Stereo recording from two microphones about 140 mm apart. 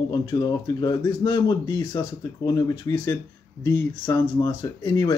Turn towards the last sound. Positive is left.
turn(degrees=25)  # may be behind; listen again after turning